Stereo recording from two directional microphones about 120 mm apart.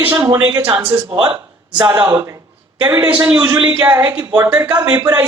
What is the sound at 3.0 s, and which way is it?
A man's voice, 10° right (ahead or behind).